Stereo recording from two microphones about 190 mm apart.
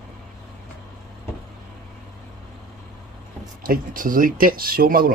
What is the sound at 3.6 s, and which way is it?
Speech, 45° right (ahead or behind).